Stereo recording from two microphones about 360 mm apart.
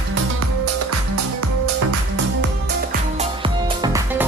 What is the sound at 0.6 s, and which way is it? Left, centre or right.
Music, right.